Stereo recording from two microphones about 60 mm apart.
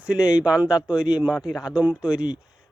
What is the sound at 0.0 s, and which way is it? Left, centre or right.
Speech, centre.